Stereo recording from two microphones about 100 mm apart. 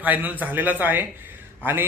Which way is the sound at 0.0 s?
15° right (ahead or behind).